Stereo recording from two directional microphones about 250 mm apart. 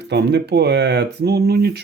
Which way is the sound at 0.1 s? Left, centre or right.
Right.